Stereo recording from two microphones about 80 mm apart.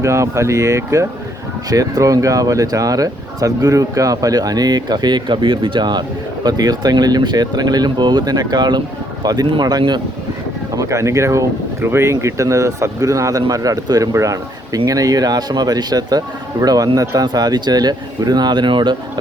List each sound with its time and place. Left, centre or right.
0.0 s speech: right
10.7 s speech: right